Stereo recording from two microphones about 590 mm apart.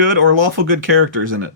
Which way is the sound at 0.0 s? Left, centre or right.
Right.